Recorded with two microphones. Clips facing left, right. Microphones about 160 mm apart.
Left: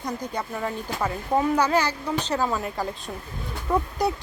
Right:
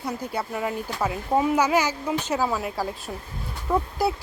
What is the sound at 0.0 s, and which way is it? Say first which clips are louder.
Speech: right 1 dB; 5° right (ahead or behind).